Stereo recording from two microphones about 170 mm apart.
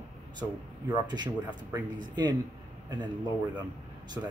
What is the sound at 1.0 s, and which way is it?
Speech, 25° right (ahead or behind).